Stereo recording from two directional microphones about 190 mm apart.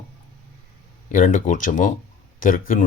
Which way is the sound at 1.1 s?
45° left (ahead or behind).